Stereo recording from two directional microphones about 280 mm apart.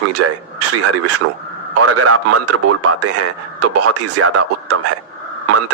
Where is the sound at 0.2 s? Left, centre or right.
Right.